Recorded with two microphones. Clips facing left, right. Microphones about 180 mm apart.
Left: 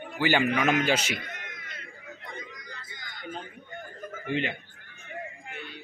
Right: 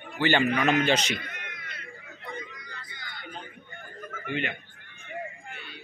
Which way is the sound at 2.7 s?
45° left (ahead or behind).